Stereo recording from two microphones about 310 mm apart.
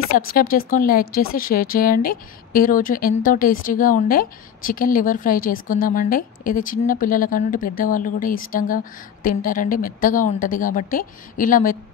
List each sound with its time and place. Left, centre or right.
0.3 s a woman's voice: left